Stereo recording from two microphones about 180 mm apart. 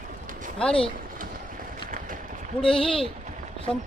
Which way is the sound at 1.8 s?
50° right (ahead or behind).